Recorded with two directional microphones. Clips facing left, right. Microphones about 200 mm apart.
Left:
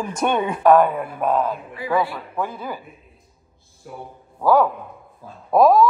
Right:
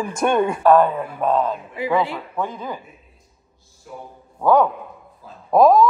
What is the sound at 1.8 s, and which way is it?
Speech, 20° right (ahead or behind).